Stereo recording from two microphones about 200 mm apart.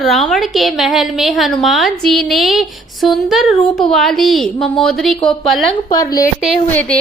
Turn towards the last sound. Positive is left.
turn(degrees=10)  # may be behind; listen again after turning